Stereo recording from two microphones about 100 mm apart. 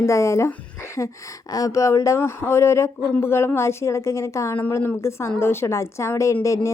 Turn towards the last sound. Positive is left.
turn(degrees=30)  # may be behind; listen again after turning